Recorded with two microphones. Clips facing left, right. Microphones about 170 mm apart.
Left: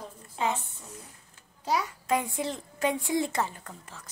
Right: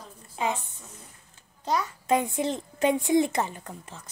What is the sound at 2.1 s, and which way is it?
A woman's voice, 20° right (ahead or behind).